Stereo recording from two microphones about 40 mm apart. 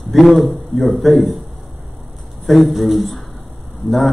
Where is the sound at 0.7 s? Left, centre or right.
Centre.